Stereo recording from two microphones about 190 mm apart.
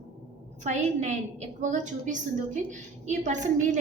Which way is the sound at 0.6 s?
40° right (ahead or behind).